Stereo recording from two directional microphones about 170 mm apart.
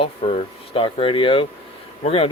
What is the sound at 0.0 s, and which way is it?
Speech, 35° left (ahead or behind).